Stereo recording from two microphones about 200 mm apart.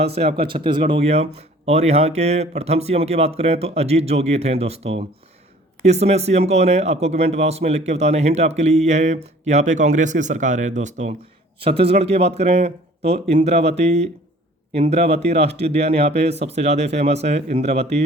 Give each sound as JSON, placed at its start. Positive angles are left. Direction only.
{"t": 0.0, "sound": "speech", "side_deg": -30}